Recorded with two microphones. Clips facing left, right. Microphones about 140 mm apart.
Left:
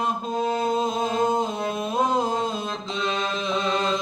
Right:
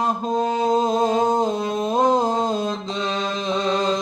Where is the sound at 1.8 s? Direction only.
30° right (ahead or behind).